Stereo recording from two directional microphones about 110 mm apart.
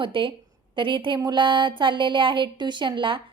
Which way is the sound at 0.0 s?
50° right (ahead or behind).